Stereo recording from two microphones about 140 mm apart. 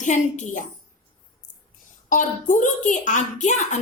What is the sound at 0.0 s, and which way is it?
Speech, 60° left (ahead or behind).